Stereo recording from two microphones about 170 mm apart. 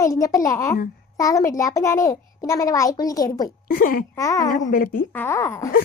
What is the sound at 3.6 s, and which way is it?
Speech, 55° left (ahead or behind).